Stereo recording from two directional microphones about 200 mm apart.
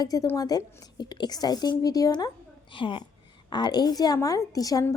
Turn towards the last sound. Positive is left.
turn(degrees=15)  # may be behind; listen again after turning